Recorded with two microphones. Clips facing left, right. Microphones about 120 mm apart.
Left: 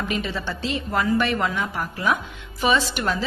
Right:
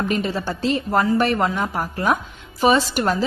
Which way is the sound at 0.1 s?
40° right (ahead or behind).